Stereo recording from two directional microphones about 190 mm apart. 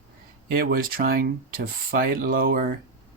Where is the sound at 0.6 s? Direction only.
50° right (ahead or behind).